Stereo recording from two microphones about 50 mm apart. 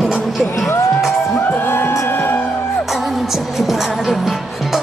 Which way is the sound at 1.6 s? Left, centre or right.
Left.